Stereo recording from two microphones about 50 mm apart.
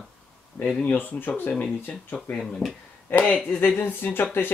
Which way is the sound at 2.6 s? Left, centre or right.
Left.